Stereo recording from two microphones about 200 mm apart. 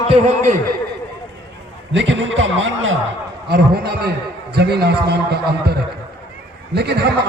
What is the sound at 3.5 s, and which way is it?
Speech, 50° right (ahead or behind).